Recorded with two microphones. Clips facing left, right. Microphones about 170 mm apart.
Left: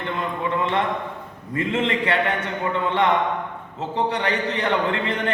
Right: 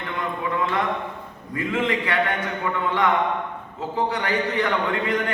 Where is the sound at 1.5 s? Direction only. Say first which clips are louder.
Left 1 dB; 25° left (ahead or behind).